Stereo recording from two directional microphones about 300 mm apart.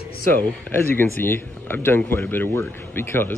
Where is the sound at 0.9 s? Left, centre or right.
Centre.